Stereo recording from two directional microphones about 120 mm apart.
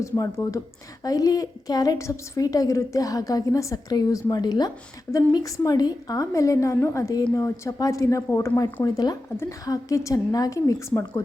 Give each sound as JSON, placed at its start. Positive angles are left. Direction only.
{"t": 0.0, "sound": "a woman's voice", "side_deg": 25}